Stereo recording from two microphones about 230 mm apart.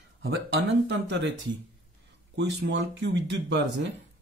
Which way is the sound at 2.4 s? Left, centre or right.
Right.